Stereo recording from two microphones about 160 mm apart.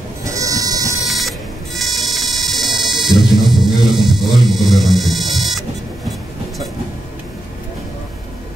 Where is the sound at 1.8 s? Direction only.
Centre (ahead or behind).